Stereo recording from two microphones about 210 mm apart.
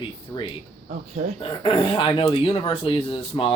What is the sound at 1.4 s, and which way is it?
Speech, 25° left (ahead or behind).